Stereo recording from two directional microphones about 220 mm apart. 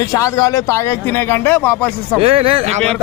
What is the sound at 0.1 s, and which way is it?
Speech, 15° left (ahead or behind).